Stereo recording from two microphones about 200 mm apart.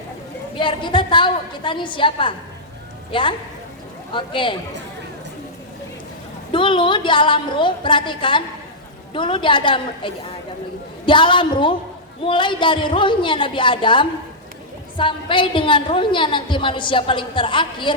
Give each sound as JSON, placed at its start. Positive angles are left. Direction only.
{"t": 0.5, "sound": "a woman's voice", "side_deg": 25}
{"t": 6.5, "sound": "a woman's voice", "side_deg": 25}